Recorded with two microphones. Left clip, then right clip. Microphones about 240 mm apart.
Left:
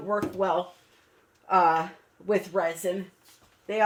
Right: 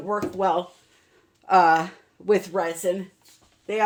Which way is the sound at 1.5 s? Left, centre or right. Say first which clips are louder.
Right 5 dB; right.